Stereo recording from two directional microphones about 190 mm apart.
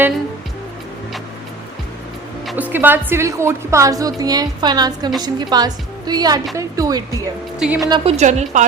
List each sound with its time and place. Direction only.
2.5 s a woman's voice: 10° right (ahead or behind)
7.6 s speech: 5° right (ahead or behind)
7.9 s a woman's voice: 30° right (ahead or behind)